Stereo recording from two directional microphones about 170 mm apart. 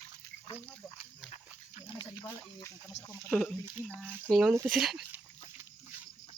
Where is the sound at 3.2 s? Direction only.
5° left (ahead or behind).